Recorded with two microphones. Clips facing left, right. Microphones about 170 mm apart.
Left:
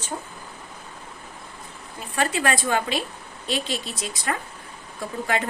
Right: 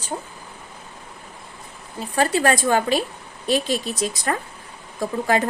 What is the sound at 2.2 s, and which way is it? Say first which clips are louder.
Speech: right 5 dB; 40° right (ahead or behind).